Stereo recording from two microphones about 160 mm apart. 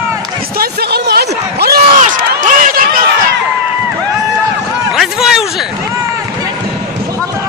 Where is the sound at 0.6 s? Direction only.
85° right.